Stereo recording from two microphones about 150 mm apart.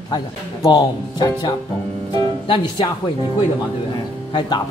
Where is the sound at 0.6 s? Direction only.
30° left (ahead or behind).